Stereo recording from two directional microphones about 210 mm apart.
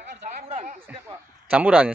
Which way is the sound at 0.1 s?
35° right (ahead or behind).